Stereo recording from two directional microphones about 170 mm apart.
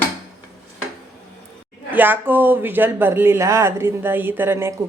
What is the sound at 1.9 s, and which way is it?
Speech, 10° right (ahead or behind).